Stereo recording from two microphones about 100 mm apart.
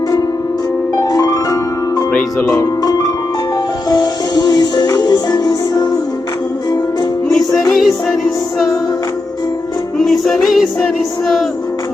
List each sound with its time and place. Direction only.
1.0 s music: 40° left (ahead or behind)
7.3 s music: centre (ahead or behind)
10.0 s music: centre (ahead or behind)